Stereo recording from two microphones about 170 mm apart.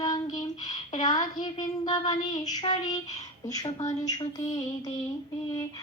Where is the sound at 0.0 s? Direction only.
20° left (ahead or behind).